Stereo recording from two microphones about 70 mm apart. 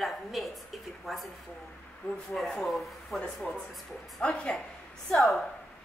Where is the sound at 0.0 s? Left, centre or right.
Centre.